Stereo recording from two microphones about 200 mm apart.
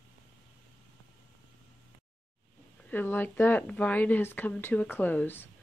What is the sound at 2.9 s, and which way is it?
Speech, 10° left (ahead or behind).